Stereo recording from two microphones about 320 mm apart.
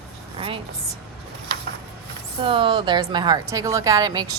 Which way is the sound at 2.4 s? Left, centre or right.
Centre.